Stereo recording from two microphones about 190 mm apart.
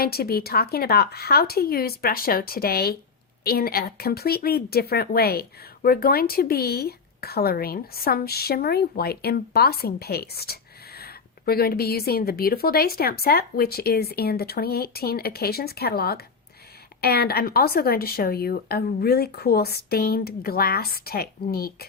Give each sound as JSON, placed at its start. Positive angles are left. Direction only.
{"t": 0.0, "sound": "speech", "side_deg": 55}